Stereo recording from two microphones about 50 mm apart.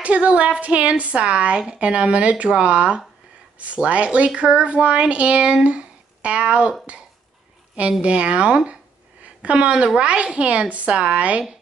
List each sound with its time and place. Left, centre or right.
0.0 s speech: right
8.0 s speech: right